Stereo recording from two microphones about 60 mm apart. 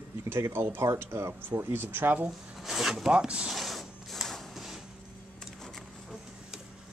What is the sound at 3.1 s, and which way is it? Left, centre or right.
Speech, centre.